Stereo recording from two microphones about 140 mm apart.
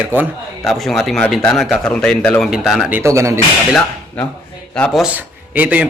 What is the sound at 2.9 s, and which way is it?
Speech, 20° right (ahead or behind).